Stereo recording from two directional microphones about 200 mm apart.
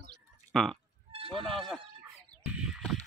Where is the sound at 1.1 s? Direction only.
30° right (ahead or behind).